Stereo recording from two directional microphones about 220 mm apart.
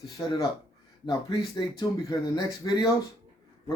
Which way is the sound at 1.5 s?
20° left (ahead or behind).